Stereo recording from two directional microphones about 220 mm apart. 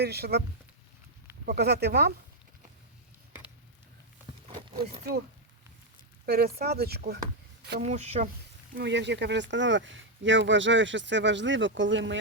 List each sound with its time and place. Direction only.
0.0 s speech: 45° right (ahead or behind)
1.5 s speech: 45° right (ahead or behind)
6.2 s speech: 45° right (ahead or behind)
7.8 s speech: 30° right (ahead or behind)
8.7 s speech: 50° right (ahead or behind)